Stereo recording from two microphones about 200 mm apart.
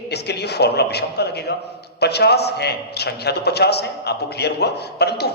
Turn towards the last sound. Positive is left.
turn(degrees=55)  # may be behind; listen again after turning